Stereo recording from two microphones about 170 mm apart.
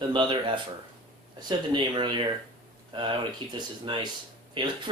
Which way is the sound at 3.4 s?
30° right (ahead or behind).